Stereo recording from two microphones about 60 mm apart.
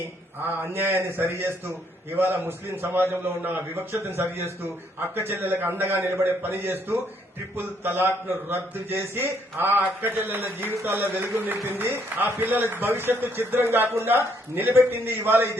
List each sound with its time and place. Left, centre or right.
0.4 s a man's voice: right
5.1 s a man's voice: right